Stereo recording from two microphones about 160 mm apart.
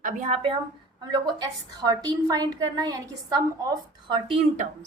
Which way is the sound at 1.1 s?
25° right (ahead or behind).